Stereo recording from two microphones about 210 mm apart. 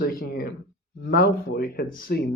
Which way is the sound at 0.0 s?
45° left (ahead or behind).